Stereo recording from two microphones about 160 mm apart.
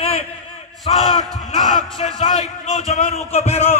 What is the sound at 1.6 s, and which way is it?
Speech, 50° left (ahead or behind).